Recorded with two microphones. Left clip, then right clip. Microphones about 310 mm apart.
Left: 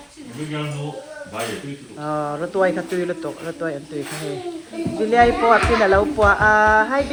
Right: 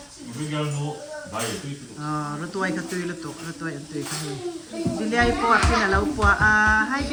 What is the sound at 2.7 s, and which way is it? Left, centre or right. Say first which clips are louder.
Speech: left 6 dB; left.